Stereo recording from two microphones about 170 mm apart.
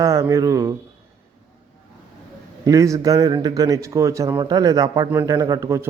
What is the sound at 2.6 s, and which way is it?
A man's voice, 20° right (ahead or behind).